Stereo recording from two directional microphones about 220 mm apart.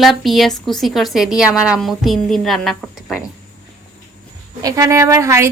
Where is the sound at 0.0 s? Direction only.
Centre (ahead or behind).